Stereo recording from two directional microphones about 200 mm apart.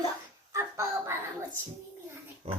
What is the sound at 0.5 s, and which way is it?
Speech, 15° right (ahead or behind).